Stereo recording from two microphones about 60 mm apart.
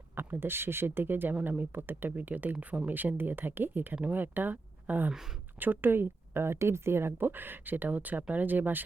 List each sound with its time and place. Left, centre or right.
0.2 s speech: right